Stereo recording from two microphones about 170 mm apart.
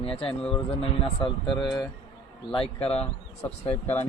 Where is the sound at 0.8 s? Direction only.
30° left (ahead or behind).